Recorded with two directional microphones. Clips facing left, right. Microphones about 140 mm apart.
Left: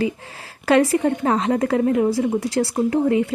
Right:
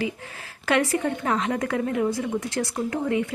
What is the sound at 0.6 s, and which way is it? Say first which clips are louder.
Speech: left 6 dB; 35° left (ahead or behind).